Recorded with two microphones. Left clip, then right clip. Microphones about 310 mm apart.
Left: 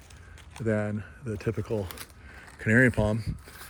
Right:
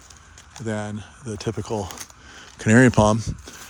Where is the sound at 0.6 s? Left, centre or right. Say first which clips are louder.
Even; centre.